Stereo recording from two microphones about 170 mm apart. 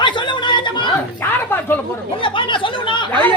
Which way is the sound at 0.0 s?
30° left (ahead or behind).